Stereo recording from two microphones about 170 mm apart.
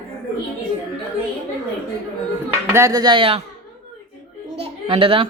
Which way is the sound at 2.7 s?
15° right (ahead or behind).